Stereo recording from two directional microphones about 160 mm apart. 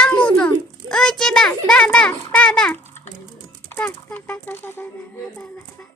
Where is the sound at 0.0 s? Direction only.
10° left (ahead or behind).